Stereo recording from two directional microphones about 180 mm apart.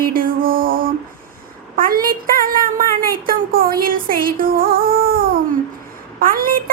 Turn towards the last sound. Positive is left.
turn(degrees=-55)  # may be behind; listen again after turning